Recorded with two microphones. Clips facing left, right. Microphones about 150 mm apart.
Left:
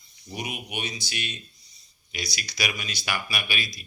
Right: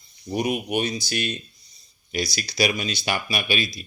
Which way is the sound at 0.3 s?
45° right (ahead or behind).